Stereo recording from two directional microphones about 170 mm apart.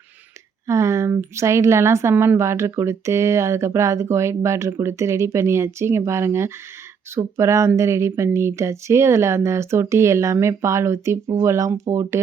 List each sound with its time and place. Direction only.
0.7 s a woman's voice: 15° right (ahead or behind)